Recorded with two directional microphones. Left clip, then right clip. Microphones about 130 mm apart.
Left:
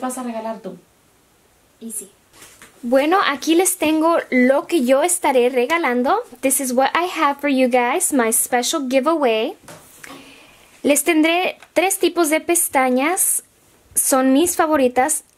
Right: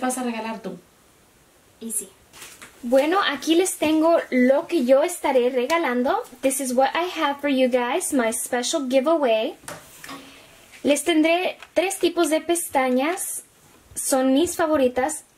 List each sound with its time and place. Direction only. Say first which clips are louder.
2.9 s speech: left 3 dB; 40° left (ahead or behind)
10.8 s speech: left 3 dB; 40° left (ahead or behind)